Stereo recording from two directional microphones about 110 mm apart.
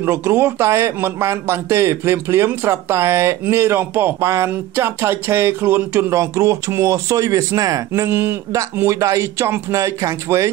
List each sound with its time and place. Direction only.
0.0 s speech: 20° right (ahead or behind)